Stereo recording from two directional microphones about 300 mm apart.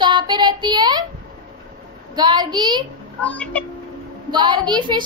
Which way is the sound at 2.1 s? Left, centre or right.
Centre.